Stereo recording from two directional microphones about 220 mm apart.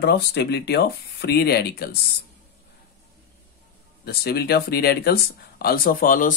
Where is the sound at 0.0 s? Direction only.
50° left (ahead or behind).